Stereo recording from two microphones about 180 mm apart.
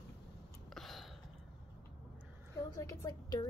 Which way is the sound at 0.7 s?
Centre (ahead or behind).